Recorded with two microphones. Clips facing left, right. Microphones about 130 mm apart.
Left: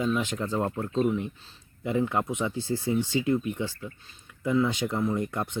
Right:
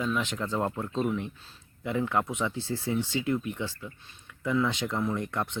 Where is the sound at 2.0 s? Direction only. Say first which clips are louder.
Left 1 dB; 10° left (ahead or behind).